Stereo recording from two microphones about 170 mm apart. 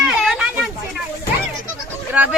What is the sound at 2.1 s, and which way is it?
Speech, 10° right (ahead or behind).